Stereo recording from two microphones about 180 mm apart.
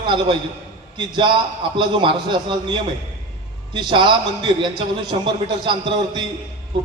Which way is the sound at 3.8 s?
25° right (ahead or behind).